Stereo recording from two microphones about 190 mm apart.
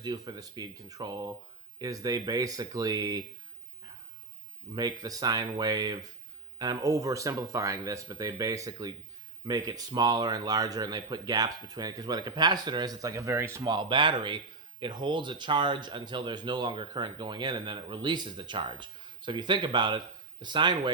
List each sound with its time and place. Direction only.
0.0 s speech: 20° right (ahead or behind)
4.7 s speech: 20° right (ahead or behind)